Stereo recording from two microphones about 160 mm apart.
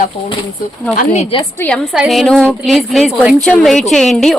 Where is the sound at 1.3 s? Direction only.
35° left (ahead or behind).